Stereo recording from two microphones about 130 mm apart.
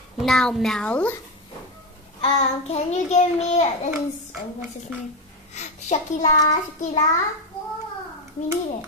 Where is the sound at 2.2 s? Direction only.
55° left (ahead or behind).